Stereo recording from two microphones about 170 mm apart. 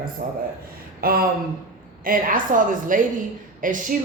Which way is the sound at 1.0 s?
60° right (ahead or behind).